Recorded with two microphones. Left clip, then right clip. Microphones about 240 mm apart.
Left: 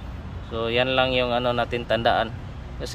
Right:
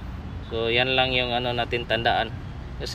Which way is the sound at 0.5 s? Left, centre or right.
Centre.